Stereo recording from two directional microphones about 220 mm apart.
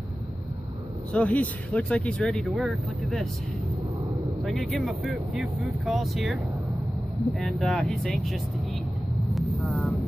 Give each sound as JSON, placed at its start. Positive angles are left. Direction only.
{"t": 1.1, "sound": "speech", "side_deg": 5}
{"t": 4.5, "sound": "speech", "side_deg": 0}
{"t": 9.3, "sound": "vehicle", "side_deg": 0}